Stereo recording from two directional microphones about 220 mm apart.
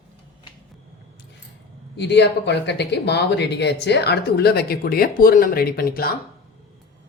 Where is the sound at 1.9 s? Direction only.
50° left (ahead or behind).